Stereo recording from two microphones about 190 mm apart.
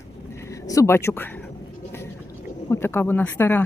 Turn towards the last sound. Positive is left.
turn(degrees=10)  # may be behind; listen again after turning